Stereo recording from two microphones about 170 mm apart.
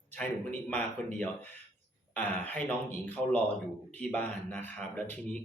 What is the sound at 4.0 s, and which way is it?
Mantra, 10° left (ahead or behind).